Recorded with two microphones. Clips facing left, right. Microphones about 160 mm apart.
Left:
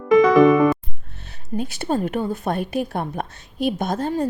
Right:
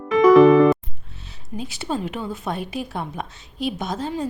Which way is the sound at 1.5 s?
55° left (ahead or behind).